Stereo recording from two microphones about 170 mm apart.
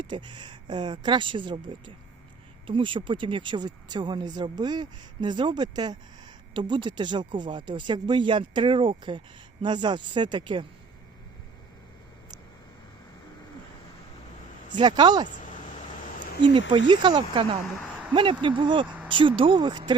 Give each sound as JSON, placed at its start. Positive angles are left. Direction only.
{"t": 0.0, "sound": "speech", "side_deg": -30}
{"t": 14.8, "sound": "speech", "side_deg": -25}
{"t": 15.3, "sound": "a sound", "side_deg": 50}
{"t": 16.4, "sound": "speech", "side_deg": -30}